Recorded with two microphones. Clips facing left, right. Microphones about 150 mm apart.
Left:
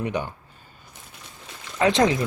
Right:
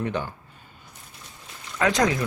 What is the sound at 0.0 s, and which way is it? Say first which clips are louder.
Speech: left 1 dB; 15° left (ahead or behind).